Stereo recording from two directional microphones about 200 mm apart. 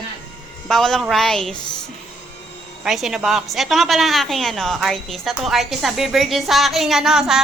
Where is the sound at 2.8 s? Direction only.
Centre (ahead or behind).